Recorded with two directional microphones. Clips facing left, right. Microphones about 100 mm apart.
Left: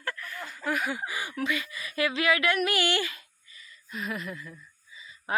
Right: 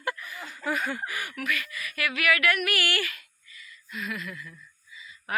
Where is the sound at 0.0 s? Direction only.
10° right (ahead or behind); by 1.0 s 5° left (ahead or behind).